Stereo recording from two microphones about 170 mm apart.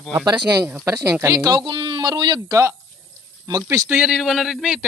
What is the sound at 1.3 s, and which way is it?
Speech, 20° right (ahead or behind).